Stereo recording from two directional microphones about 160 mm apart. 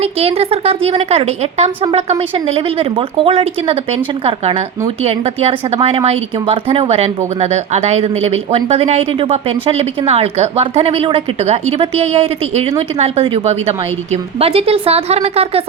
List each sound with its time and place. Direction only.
0.0 s speech: 40° right (ahead or behind)